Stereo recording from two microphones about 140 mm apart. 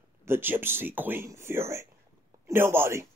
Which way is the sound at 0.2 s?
15° right (ahead or behind).